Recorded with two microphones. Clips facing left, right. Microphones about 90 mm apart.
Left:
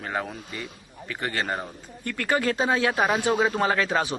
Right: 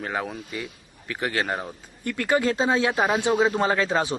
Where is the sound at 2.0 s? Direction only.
15° right (ahead or behind).